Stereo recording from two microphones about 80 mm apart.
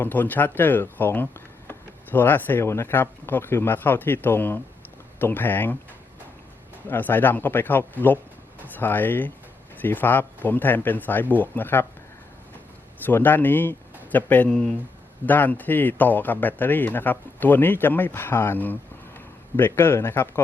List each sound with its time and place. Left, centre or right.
0.0 s speech: left
6.8 s speech: left
13.1 s speech: left
14.5 s speech: centre
15.3 s speech: left